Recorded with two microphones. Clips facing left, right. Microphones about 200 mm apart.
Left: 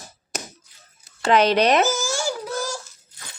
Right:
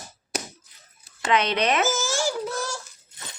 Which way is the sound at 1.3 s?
35° left (ahead or behind).